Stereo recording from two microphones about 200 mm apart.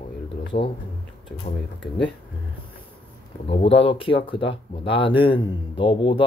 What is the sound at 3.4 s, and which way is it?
Speech, 30° left (ahead or behind).